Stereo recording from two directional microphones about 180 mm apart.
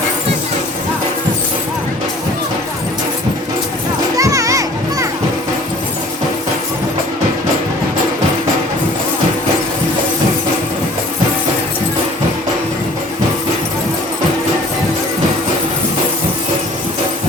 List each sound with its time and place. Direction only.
4.2 s children playing: 20° right (ahead or behind)